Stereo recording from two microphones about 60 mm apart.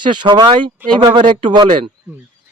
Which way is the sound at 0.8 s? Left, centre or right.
Right.